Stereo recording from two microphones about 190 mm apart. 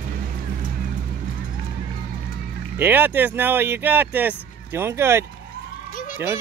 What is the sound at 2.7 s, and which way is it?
Speech, 10° right (ahead or behind).